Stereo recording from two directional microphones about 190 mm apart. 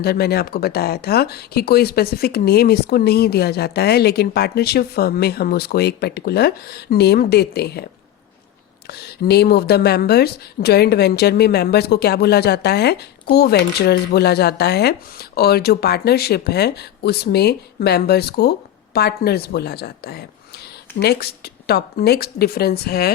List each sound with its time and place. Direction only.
0.0 s speech: 55° left (ahead or behind)
8.9 s speech: 60° left (ahead or behind)